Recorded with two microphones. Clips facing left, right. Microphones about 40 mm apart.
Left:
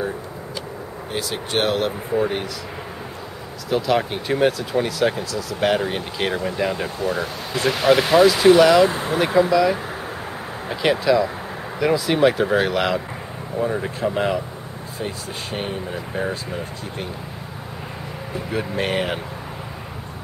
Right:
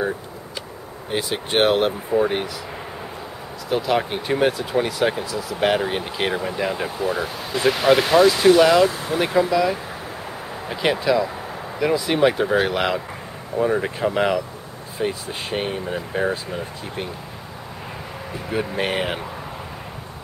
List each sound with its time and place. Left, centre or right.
1.1 s speech: right
3.7 s speech: centre
8.8 s speech: left
9.5 s speech: centre
10.7 s speech: centre
18.3 s speech: centre